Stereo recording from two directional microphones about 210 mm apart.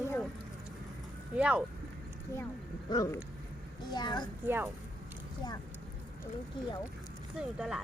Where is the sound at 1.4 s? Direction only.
5° right (ahead or behind).